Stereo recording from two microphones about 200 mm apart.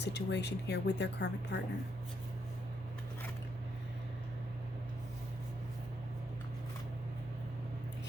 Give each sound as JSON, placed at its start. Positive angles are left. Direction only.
{"t": 0.0, "sound": "speech", "side_deg": 60}